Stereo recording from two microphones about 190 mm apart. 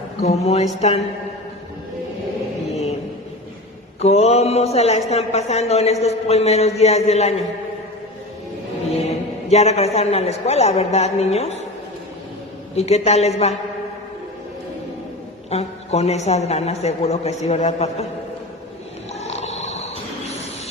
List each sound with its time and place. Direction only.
0.2 s speech: 35° left (ahead or behind)
2.6 s a sound: 35° left (ahead or behind)
4.0 s speech: 35° left (ahead or behind)
8.9 s a man's voice: 35° left (ahead or behind)
12.7 s speech: 35° left (ahead or behind)
15.4 s speech: 35° left (ahead or behind)
19.2 s wild animals: 35° left (ahead or behind)